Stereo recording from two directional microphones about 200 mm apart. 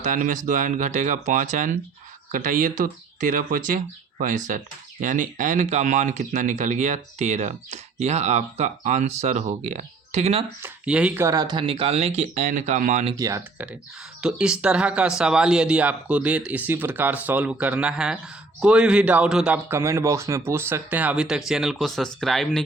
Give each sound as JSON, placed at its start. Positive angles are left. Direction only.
{"t": 0.0, "sound": "speech", "side_deg": -40}
{"t": 10.6, "sound": "speech", "side_deg": -5}
{"t": 13.1, "sound": "a man's voice", "side_deg": -15}